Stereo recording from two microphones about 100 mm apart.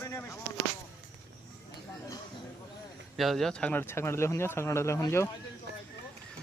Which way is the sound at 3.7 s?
20° left (ahead or behind).